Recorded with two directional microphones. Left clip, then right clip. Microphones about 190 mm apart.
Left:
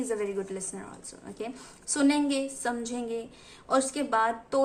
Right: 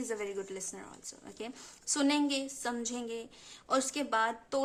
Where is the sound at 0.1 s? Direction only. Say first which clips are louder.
Left 6 dB; 35° right (ahead or behind).